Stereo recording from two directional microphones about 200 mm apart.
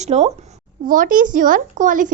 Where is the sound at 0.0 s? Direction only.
35° right (ahead or behind).